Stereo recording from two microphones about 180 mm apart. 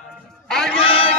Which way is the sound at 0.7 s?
30° left (ahead or behind).